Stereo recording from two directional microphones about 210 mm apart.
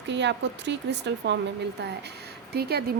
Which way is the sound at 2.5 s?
50° right (ahead or behind).